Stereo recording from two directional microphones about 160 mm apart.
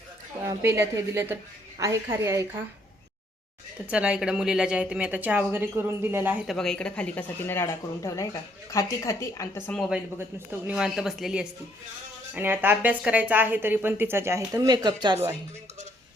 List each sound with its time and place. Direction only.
0.4 s a woman's voice: 15° right (ahead or behind)
3.8 s a woman's voice: 5° right (ahead or behind)
6.5 s speech: 5° left (ahead or behind)
9.9 s a woman's voice: 10° right (ahead or behind)